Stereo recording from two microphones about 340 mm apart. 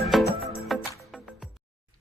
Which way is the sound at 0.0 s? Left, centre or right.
Centre.